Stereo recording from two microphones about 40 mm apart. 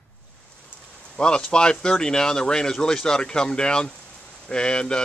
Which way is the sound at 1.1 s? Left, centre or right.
Left.